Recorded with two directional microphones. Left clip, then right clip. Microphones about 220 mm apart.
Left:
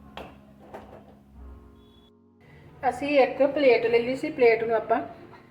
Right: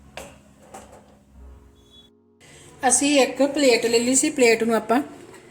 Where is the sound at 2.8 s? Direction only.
50° right (ahead or behind).